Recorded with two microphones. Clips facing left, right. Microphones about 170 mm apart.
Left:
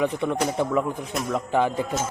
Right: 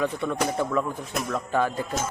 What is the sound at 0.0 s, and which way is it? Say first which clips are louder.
Speech: left 2 dB; 15° left (ahead or behind).